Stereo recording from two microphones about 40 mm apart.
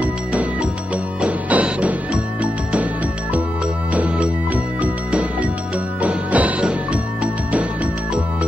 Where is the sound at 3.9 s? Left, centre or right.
Right.